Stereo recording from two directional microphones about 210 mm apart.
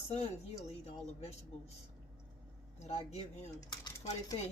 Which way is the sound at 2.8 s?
30° left (ahead or behind).